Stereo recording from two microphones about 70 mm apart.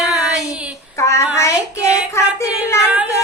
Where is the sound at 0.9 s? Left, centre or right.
Left.